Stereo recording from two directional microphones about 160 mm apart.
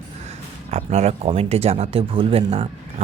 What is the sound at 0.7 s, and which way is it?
Speech, 45° right (ahead or behind).